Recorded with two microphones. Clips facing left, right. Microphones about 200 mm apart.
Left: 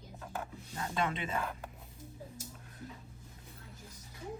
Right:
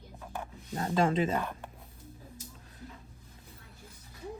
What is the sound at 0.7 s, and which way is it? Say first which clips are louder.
Speech: right 8 dB; 40° right (ahead or behind).